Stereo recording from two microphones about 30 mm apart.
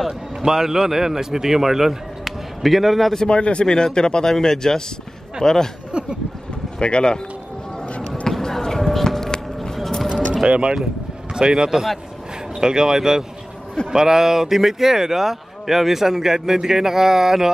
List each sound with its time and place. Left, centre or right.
0.5 s a man's voice: centre
3.3 s speech: left
3.6 s speech: left
4.3 s speech: centre
5.9 s a sound: right
6.8 s speech: left
8.3 s a sound: centre
10.5 s speech: right
11.3 s speech: right